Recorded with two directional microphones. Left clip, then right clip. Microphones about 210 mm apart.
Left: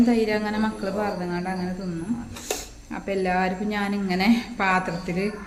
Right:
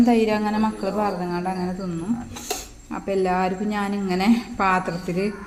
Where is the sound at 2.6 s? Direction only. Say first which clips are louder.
Right 2 dB; 10° right (ahead or behind).